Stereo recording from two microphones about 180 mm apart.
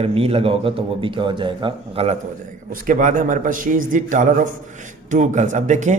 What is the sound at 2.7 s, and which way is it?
Speech, 45° right (ahead or behind).